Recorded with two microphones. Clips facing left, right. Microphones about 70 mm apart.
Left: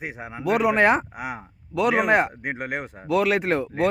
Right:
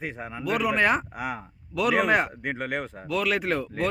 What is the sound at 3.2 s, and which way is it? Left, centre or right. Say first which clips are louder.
Speech: left 1 dB; left.